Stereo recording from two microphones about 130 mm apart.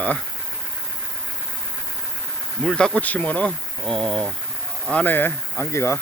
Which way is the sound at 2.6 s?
5° left (ahead or behind).